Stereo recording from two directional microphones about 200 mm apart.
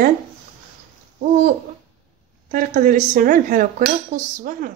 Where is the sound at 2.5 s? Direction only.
40° right (ahead or behind).